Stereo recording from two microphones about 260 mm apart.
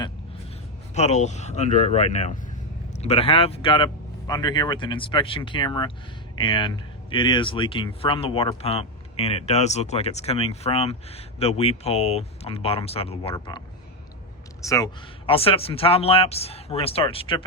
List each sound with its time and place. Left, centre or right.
0.9 s speech: left
14.6 s speech: centre